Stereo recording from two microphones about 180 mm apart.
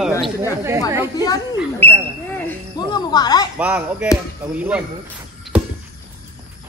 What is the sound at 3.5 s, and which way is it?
Speech, 10° right (ahead or behind).